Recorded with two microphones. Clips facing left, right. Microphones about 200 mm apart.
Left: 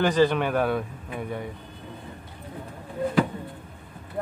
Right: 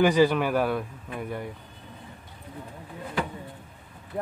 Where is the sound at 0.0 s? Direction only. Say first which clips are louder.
Right 1 dB; 10° right (ahead or behind).